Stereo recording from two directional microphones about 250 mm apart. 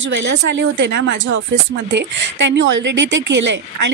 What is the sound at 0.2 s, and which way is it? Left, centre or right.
Speech, right.